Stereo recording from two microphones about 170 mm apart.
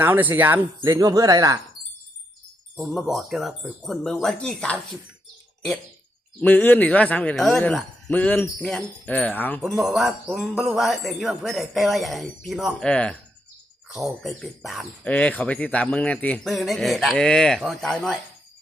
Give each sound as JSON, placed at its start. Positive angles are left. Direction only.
{"t": 0.0, "sound": "speech", "side_deg": -10}
{"t": 0.8, "sound": "speech", "side_deg": -20}
{"t": 2.7, "sound": "speech", "side_deg": 0}
{"t": 6.4, "sound": "speech", "side_deg": 10}
{"t": 9.6, "sound": "speech", "side_deg": 0}